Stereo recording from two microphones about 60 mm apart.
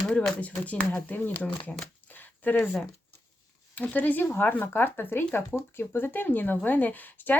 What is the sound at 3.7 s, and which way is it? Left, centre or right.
Speech, left.